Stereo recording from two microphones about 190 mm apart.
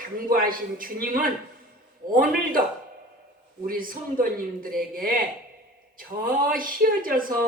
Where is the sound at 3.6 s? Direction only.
50° right (ahead or behind).